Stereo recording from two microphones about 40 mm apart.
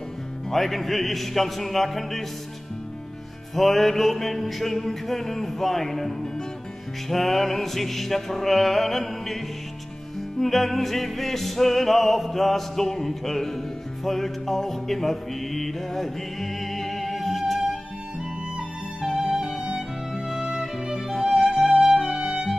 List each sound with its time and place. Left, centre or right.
0.5 s music: centre
3.5 s music: centre
10.4 s music: centre
19.0 s music: centre
19.6 s music: right
20.2 s music: centre